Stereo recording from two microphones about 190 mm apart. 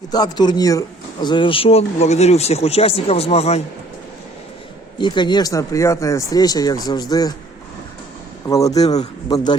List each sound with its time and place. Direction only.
0.1 s speech: 20° left (ahead or behind)
4.9 s speech: 25° left (ahead or behind)
8.4 s speech: 15° left (ahead or behind)